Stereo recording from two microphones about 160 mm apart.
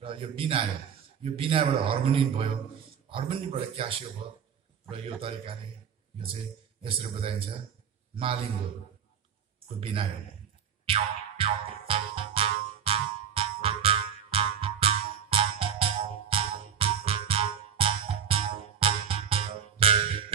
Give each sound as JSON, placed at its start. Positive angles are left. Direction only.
{"t": 0.0, "sound": "a man's voice", "side_deg": -35}
{"t": 6.8, "sound": "a man's voice", "side_deg": -35}
{"t": 9.8, "sound": "a man's voice", "side_deg": -35}
{"t": 10.9, "sound": "music", "side_deg": -35}